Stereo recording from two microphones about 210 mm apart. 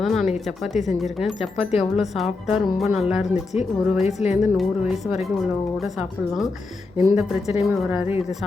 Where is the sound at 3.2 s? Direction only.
30° left (ahead or behind).